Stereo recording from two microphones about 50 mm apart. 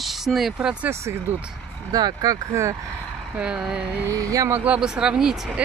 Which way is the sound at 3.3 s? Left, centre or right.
Right.